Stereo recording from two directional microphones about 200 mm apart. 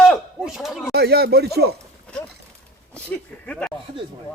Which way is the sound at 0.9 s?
50° right (ahead or behind).